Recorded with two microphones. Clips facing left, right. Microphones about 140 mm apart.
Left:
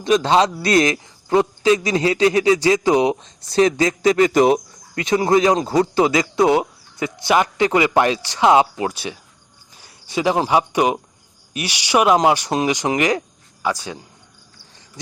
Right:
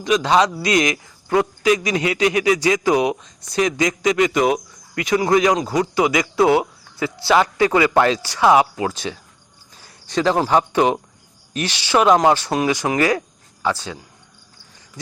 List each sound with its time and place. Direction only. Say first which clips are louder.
0.0 s a man's voice: left 1 dB; 30° left (ahead or behind)
9.8 s speech: right 1 dB; 10° left (ahead or behind)